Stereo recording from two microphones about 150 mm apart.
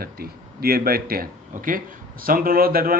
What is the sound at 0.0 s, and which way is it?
A man's voice, 90° right.